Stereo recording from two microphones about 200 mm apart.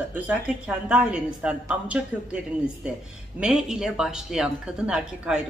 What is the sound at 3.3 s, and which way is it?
Speech, 5° right (ahead or behind).